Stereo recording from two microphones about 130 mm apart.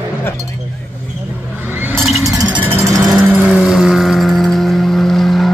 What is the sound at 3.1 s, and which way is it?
Vehicle, 15° right (ahead or behind).